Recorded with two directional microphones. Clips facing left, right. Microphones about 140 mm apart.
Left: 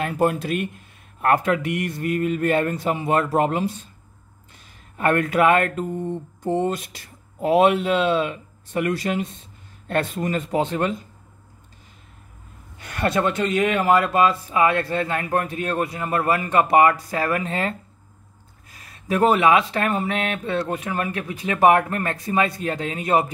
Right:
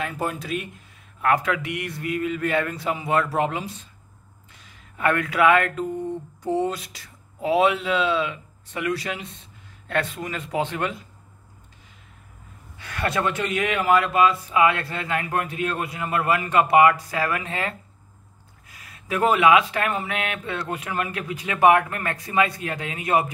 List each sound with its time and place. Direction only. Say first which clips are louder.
0.0 s speech: left 7 dB; 60° left (ahead or behind)
1.2 s speech: left 3 dB; 45° left (ahead or behind)
4.9 s speech: left 3 dB; 45° left (ahead or behind)
13.2 s speech: left 4 dB; 30° left (ahead or behind)
18.9 s speech: left 3 dB; 35° left (ahead or behind)